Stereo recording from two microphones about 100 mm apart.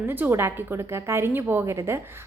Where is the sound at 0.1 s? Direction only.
20° right (ahead or behind).